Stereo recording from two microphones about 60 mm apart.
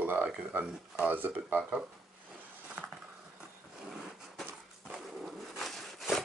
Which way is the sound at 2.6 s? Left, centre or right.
Right.